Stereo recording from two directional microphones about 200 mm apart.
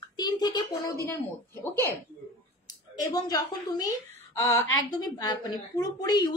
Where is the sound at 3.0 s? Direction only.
20° left (ahead or behind).